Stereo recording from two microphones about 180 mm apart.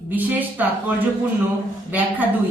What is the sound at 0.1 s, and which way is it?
Speech, 10° right (ahead or behind).